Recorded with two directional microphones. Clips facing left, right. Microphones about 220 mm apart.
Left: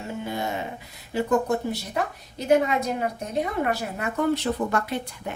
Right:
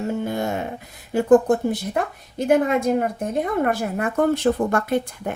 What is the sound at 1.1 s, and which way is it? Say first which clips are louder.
A woman's voice: right 8 dB; 50° right (ahead or behind).